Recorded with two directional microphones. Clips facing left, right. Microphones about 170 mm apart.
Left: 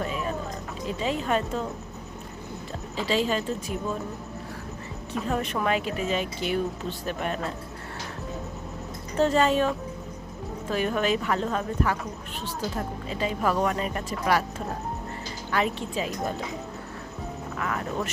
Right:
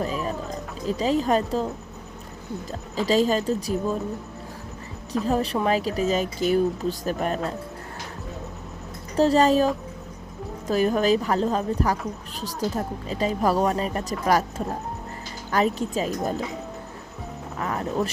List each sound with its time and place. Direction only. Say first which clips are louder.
0.0 s a sound: right 3 dB; 35° right (ahead or behind)
0.9 s speech: right 5 dB; 35° right (ahead or behind)
2.9 s speech: right 5 dB; 40° right (ahead or behind)
5.2 s speech: right 4 dB; 35° right (ahead or behind)
9.1 s speech: right 4 dB; 35° right (ahead or behind)
10.7 s speech: right 5 dB; 35° right (ahead or behind)
15.5 s speech: right 4 dB; 40° right (ahead or behind)
17.6 s speech: right 4 dB; 35° right (ahead or behind)